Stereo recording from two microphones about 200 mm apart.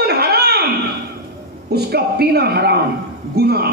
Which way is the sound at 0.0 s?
55° right (ahead or behind).